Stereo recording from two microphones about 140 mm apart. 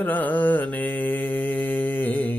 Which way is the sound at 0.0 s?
10° left (ahead or behind).